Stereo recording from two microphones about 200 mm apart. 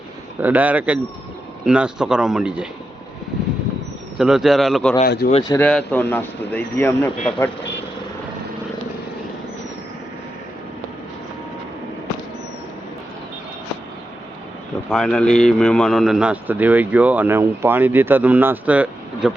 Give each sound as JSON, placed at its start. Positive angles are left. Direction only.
{"t": 0.4, "sound": "a man's voice", "side_deg": -10}
{"t": 4.2, "sound": "a man's voice", "side_deg": 0}
{"t": 5.0, "sound": "speech", "side_deg": 50}
{"t": 5.4, "sound": "speech", "side_deg": 15}
{"t": 14.8, "sound": "a man's voice", "side_deg": 0}